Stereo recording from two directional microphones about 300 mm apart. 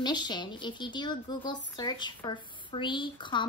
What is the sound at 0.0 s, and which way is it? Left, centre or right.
A woman's voice, centre.